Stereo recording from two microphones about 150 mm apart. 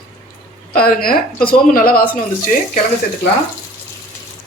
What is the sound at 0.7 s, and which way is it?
A woman's voice, 80° left.